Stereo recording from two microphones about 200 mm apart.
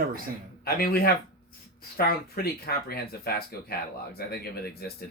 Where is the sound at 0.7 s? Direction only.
50° left (ahead or behind).